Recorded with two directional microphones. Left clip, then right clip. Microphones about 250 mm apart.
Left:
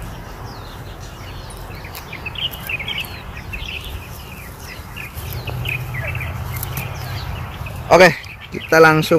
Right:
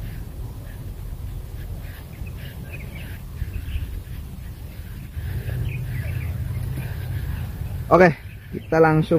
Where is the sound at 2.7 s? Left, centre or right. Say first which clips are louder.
Left 14 dB; centre.